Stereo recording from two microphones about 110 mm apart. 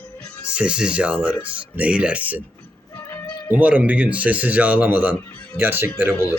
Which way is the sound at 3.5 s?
15° right (ahead or behind).